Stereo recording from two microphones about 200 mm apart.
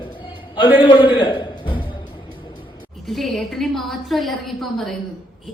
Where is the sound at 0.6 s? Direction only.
10° right (ahead or behind).